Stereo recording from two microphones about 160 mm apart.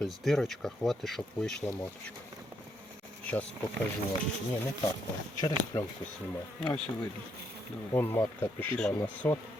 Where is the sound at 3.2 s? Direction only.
10° left (ahead or behind).